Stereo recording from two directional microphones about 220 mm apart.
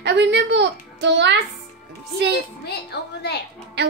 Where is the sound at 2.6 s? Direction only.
50° left (ahead or behind).